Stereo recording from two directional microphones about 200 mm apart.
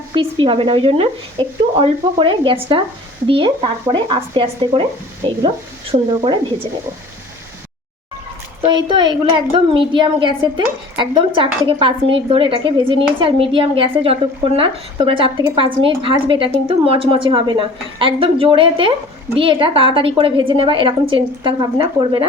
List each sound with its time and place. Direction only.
0.1 s a woman's voice: 25° right (ahead or behind)
8.6 s a woman's voice: 25° right (ahead or behind)